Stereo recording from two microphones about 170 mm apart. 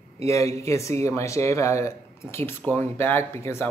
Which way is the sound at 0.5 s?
15° left (ahead or behind).